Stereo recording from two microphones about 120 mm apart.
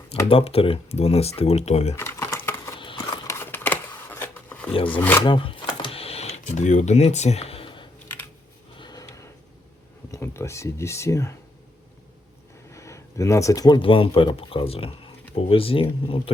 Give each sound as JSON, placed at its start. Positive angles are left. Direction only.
{"t": 0.3, "sound": "speech", "side_deg": 55}
{"t": 2.0, "sound": "computer keyboard", "side_deg": 25}
{"t": 2.7, "sound": "a sound", "side_deg": 45}
{"t": 3.2, "sound": "camera", "side_deg": 20}
{"t": 4.9, "sound": "speech", "side_deg": 15}
{"t": 5.2, "sound": "a sound", "side_deg": 45}
{"t": 8.8, "sound": "a sound", "side_deg": 30}
{"t": 10.1, "sound": "speech", "side_deg": 20}
{"t": 12.7, "sound": "speech", "side_deg": 25}